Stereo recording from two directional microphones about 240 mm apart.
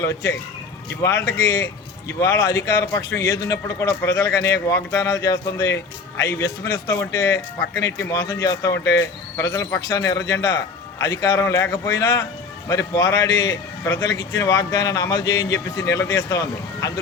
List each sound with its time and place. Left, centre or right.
0.0 s a man's voice: centre